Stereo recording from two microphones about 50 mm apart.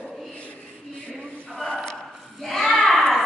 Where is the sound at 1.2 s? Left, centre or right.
Centre.